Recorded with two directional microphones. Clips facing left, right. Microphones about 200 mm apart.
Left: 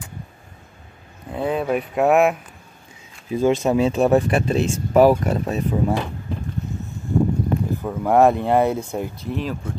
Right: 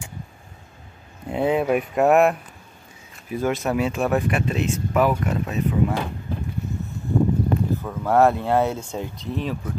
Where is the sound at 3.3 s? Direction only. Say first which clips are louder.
Left 5 dB; 25° left (ahead or behind).